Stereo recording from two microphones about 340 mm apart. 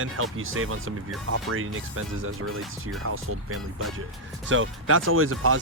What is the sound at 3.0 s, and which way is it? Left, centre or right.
Speech, right.